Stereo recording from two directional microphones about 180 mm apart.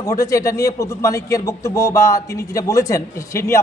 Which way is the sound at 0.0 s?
20° left (ahead or behind).